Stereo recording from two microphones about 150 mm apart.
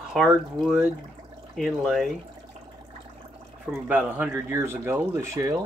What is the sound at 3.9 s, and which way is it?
Speech, 10° right (ahead or behind).